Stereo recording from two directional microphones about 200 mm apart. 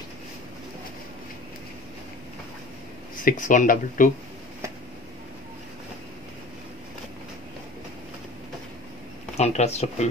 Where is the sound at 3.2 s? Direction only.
40° left (ahead or behind).